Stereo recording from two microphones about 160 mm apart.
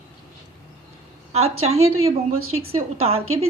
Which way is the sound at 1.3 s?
40° right (ahead or behind).